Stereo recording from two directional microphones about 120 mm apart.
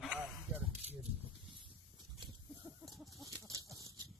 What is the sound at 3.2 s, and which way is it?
Livestock, 30° right (ahead or behind).